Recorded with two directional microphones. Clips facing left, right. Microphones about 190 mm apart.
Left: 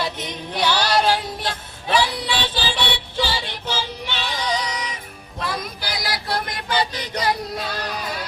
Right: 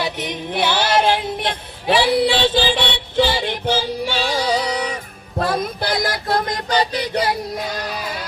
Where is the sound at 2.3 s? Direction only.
50° right (ahead or behind).